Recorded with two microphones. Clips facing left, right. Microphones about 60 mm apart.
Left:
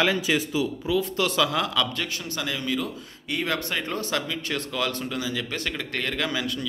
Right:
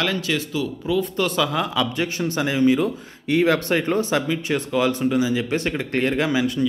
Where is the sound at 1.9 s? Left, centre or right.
Right.